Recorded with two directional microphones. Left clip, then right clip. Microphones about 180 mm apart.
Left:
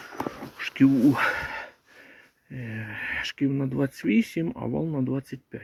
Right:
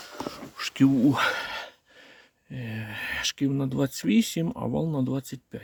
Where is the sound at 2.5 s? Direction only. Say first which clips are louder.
Even; 30° right (ahead or behind).